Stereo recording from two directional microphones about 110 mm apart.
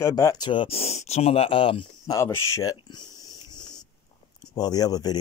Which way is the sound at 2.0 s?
30° left (ahead or behind).